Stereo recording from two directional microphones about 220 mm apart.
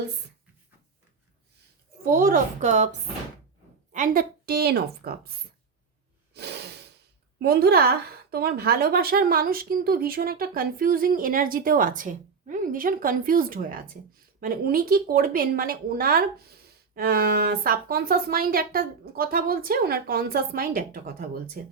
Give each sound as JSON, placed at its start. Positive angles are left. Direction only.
{"t": 2.1, "sound": "a woman's voice", "side_deg": -40}
{"t": 3.9, "sound": "a woman's voice", "side_deg": -40}
{"t": 6.3, "sound": "breathing", "side_deg": -50}
{"t": 7.3, "sound": "a woman's voice", "side_deg": -45}